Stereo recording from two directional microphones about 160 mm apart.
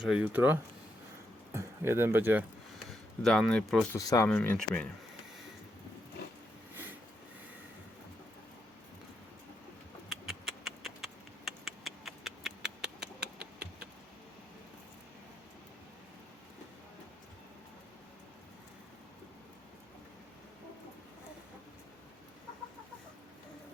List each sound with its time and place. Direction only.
0.0 s speech: 5° right (ahead or behind)
2.7 s speech: centre (ahead or behind)
3.9 s speech: 20° left (ahead or behind)
4.3 s speech: 5° left (ahead or behind)
10.1 s a sound: centre (ahead or behind)